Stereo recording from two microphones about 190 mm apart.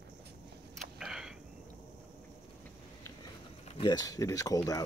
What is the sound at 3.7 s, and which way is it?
Speech, 25° left (ahead or behind).